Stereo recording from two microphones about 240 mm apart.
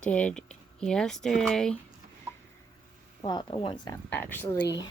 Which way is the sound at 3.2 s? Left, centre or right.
Centre.